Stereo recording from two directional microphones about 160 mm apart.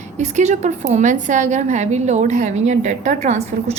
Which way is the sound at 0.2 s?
45° right (ahead or behind).